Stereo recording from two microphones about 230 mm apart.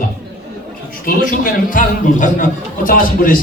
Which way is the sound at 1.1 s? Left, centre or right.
Left.